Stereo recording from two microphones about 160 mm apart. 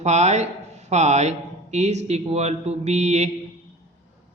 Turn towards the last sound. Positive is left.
turn(degrees=-45)  # may be behind; listen again after turning